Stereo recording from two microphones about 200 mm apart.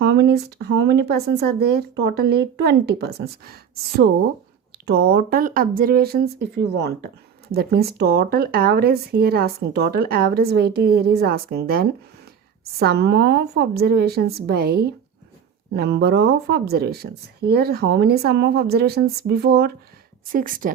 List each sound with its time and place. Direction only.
0.0 s speech: 55° right (ahead or behind)